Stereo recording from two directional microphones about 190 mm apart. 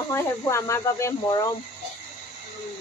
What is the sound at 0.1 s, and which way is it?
Speech, 15° left (ahead or behind).